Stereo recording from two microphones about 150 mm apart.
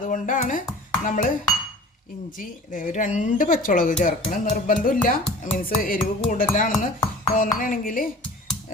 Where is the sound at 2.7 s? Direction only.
60° left (ahead or behind).